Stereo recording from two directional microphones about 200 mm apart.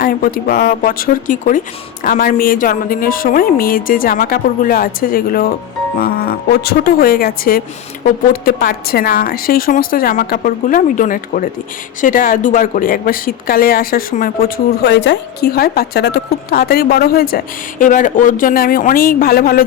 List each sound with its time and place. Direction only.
0.0 s speech: 45° left (ahead or behind)